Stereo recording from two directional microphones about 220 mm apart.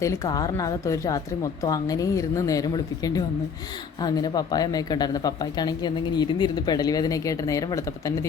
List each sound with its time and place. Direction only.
0.0 s speech: 15° left (ahead or behind)